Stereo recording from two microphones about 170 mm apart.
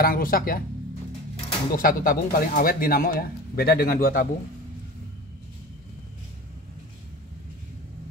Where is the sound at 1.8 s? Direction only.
60° left (ahead or behind).